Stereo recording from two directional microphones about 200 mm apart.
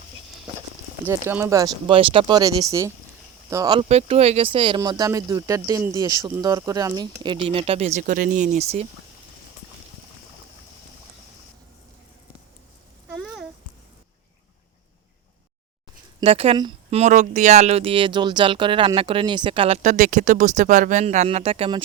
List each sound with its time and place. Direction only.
1.0 s speech: 10° right (ahead or behind); by 8.9 s 30° right (ahead or behind)
13.1 s a sound: centre (ahead or behind)
16.2 s speech: 30° right (ahead or behind)